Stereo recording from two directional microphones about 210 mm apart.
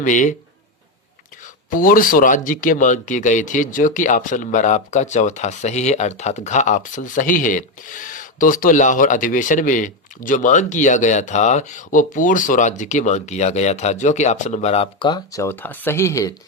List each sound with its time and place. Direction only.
0.0 s speech: 35° left (ahead or behind)
1.7 s speech: 40° left (ahead or behind); by 16.3 s 15° left (ahead or behind)